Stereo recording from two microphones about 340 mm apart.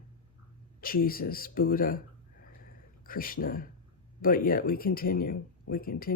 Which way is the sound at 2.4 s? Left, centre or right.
Left.